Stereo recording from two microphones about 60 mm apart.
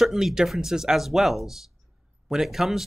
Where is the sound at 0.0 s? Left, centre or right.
Centre.